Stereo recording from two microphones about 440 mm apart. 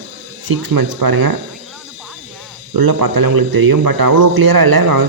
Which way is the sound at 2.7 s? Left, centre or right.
Right.